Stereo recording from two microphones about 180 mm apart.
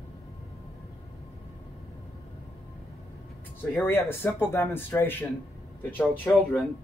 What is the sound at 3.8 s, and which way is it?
Speech, 15° left (ahead or behind).